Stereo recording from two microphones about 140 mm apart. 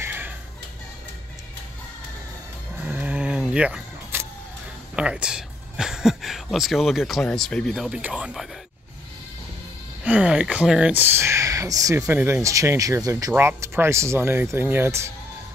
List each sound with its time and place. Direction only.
0.0 s music: 15° right (ahead or behind)
2.8 s vehicle: 10° right (ahead or behind)
4.9 s speech: 5° right (ahead or behind)
10.0 s speech: 10° right (ahead or behind)